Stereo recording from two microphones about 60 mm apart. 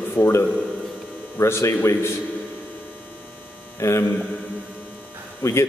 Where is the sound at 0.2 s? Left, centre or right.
Left.